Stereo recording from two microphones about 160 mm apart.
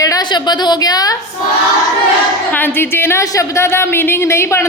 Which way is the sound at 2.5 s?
10° left (ahead or behind).